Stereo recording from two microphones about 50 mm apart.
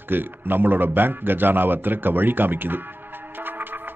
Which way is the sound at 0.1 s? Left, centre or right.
Right.